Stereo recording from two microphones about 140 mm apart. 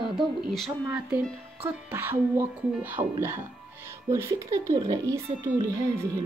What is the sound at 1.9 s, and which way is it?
A woman's voice, 15° right (ahead or behind).